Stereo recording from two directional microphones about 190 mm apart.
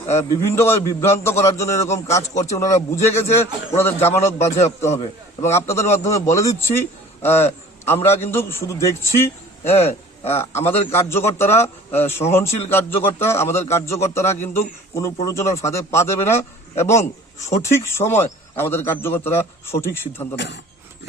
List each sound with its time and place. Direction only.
0.4 s a man's voice: 15° left (ahead or behind)
20.3 s speech: 65° left (ahead or behind)